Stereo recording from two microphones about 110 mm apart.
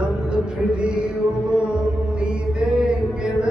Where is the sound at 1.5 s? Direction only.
5° right (ahead or behind).